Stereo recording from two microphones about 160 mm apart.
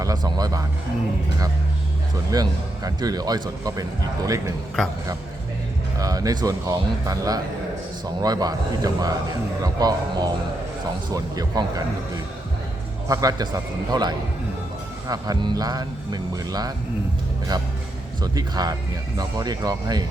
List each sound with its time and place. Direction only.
0.0 s speech: 25° right (ahead or behind)
2.3 s speech: 25° right (ahead or behind)
6.0 s speech: 20° right (ahead or behind)
13.1 s speech: 25° right (ahead or behind)